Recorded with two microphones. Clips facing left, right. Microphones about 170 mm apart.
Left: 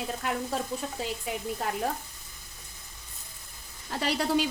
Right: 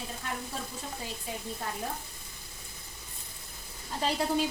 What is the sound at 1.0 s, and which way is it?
Speech, 85° left.